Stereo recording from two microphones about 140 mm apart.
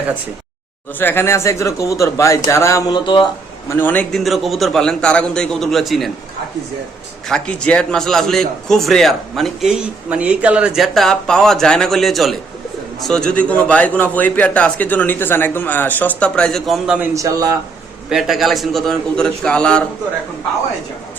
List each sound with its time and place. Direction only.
0.9 s speech: 15° left (ahead or behind); by 3.2 s 30° left (ahead or behind)
3.7 s a man's voice: 15° left (ahead or behind)
4.2 s a man's voice: centre (ahead or behind)
7.3 s a man's voice: 5° left (ahead or behind)
17.2 s speech: 25° right (ahead or behind)
18.1 s a man's voice: centre (ahead or behind)